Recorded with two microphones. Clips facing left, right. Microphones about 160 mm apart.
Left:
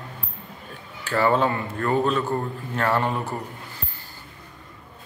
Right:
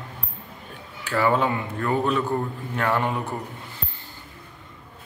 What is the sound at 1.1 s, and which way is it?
A man's voice, 10° right (ahead or behind).